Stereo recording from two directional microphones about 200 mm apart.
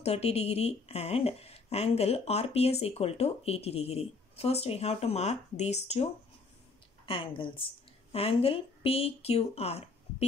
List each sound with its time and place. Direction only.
0.0 s speech: 30° left (ahead or behind)
7.1 s speech: 25° left (ahead or behind)